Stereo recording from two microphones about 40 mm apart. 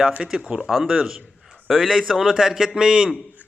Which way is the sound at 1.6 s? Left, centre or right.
Centre.